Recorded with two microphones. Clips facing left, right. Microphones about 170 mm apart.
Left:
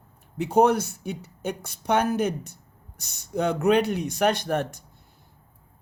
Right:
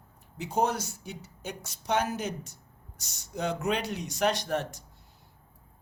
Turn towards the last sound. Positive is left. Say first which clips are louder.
# left 5 dB
turn(degrees=55)  # may be behind; listen again after turning